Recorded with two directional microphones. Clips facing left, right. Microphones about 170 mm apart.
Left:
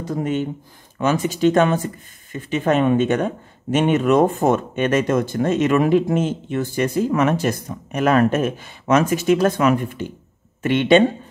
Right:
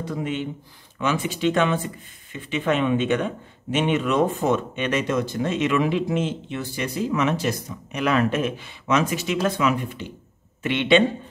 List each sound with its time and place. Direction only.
0.0 s speech: 45° left (ahead or behind)